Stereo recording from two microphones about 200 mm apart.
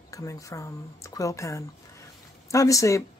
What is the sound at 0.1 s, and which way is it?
Speech, 15° left (ahead or behind).